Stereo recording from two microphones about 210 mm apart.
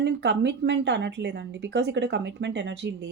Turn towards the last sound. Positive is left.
turn(degrees=-55)  # may be behind; listen again after turning